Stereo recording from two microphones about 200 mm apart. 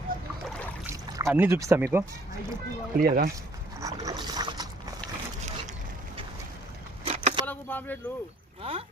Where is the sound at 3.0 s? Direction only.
50° right (ahead or behind).